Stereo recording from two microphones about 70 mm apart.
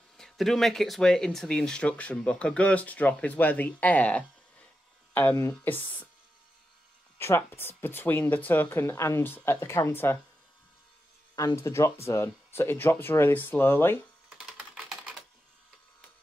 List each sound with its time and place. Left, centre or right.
0.2 s speech: centre
5.3 s speech: left
7.2 s speech: left
11.5 s speech: left
14.4 s typing: centre